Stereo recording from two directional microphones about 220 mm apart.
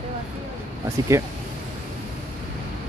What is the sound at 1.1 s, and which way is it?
Speech, 15° right (ahead or behind).